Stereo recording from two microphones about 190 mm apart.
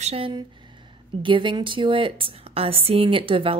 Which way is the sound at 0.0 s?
30° right (ahead or behind).